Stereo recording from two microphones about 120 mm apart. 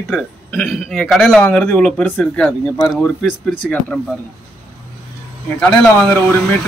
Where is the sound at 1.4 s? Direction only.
15° left (ahead or behind).